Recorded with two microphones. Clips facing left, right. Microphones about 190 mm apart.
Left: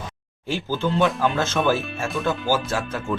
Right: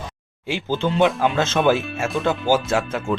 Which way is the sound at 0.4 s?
20° right (ahead or behind).